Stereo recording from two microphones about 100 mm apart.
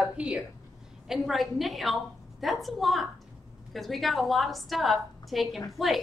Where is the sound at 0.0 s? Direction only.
10° right (ahead or behind).